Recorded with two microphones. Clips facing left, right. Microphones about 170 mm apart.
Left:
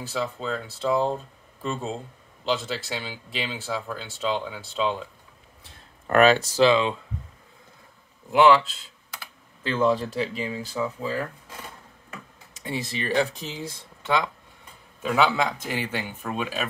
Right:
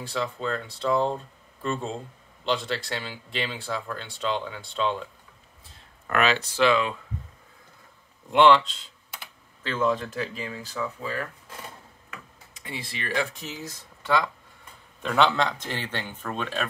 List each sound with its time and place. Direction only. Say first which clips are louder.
0.0 s speech: even; 5° left (ahead or behind)
6.0 s speech: left 6 dB; 45° left (ahead or behind); by 7.0 s 25° left (ahead or behind)
8.3 s speech: left 1 dB; 5° left (ahead or behind)
9.8 s speech: left 3 dB; 30° left (ahead or behind)
10.3 s speech: left 5 dB; 20° left (ahead or behind)
12.6 s speech: left 6 dB; 40° left (ahead or behind); by 14.3 s 20° left (ahead or behind)
15.0 s a man's voice: even; 5° left (ahead or behind)